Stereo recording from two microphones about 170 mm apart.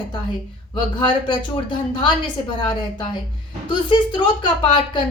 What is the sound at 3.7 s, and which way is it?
Speech, 25° left (ahead or behind).